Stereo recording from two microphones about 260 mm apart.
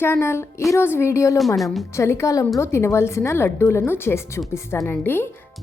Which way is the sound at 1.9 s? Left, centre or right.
Centre.